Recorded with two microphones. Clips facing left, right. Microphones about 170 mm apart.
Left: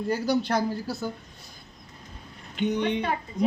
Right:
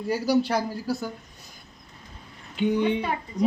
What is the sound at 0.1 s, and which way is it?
Speech, 5° right (ahead or behind).